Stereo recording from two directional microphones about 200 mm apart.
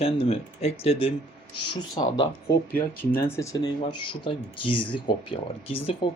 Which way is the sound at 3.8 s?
25° left (ahead or behind).